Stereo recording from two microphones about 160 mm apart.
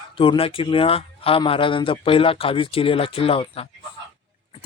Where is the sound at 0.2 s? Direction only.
35° left (ahead or behind).